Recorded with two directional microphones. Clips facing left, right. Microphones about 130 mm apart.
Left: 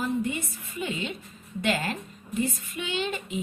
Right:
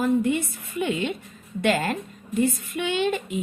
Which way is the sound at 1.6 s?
45° right (ahead or behind).